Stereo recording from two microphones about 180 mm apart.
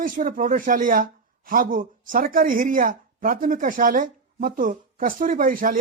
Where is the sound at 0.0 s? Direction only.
50° right (ahead or behind).